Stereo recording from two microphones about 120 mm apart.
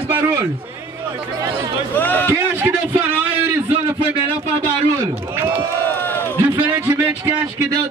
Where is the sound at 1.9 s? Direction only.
15° left (ahead or behind).